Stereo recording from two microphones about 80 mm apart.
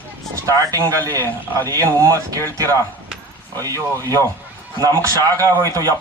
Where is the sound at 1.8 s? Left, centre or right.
Right.